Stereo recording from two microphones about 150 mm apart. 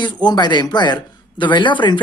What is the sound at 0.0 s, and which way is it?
A man's voice, 30° left (ahead or behind).